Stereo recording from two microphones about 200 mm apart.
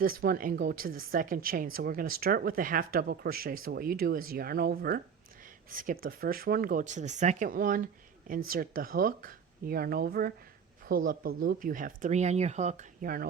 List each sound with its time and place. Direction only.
0.0 s speech: 45° right (ahead or behind)